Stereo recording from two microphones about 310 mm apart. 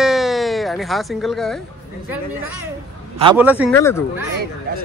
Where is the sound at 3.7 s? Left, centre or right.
Centre.